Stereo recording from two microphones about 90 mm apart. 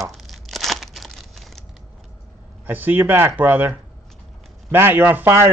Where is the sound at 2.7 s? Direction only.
20° right (ahead or behind).